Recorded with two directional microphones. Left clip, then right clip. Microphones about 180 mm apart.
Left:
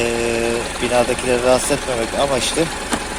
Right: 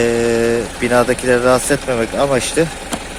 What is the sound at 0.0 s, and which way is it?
Pump, 50° right (ahead or behind).